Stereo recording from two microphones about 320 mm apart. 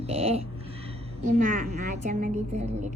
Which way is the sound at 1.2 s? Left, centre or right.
Right.